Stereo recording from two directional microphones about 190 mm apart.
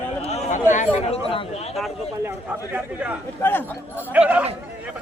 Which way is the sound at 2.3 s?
10° right (ahead or behind).